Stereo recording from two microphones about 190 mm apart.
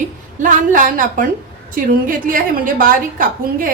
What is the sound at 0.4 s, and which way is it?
A woman's voice, 45° right (ahead or behind).